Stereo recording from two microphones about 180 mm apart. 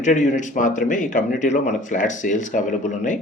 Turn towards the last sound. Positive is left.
turn(degrees=45)  # may be behind; listen again after turning